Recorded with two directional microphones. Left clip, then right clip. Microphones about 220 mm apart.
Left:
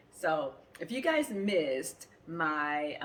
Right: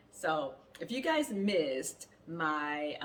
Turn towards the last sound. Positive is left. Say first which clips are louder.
# left 2 dB
turn(degrees=-5)  # may be behind; listen again after turning